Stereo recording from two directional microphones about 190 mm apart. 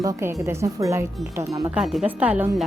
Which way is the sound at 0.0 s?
15° right (ahead or behind).